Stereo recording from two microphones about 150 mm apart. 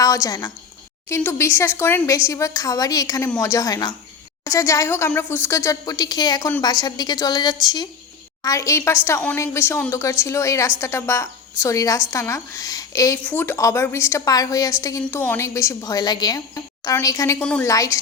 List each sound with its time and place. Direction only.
0.0 s a woman's voice: 20° left (ahead or behind)
17.4 s a woman's voice: 5° left (ahead or behind)
17.7 s a woman's voice: 20° left (ahead or behind)